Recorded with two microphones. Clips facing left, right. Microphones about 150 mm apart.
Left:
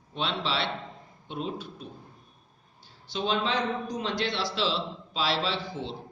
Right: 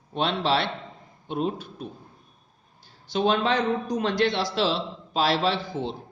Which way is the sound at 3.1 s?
55° right (ahead or behind).